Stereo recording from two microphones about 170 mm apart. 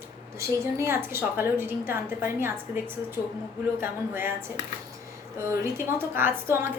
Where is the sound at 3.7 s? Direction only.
15° right (ahead or behind).